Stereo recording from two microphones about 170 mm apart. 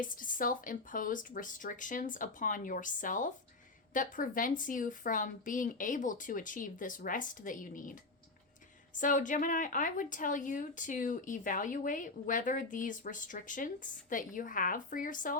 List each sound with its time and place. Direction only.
0.0 s a woman's voice: 50° left (ahead or behind)
9.0 s a woman's voice: 50° left (ahead or behind)